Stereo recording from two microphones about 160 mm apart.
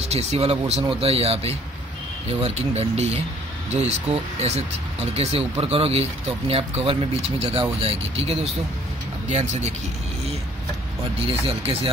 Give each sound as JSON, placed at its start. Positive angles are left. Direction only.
{"t": 0.0, "sound": "speech", "side_deg": -40}
{"t": 11.2, "sound": "speech", "side_deg": -40}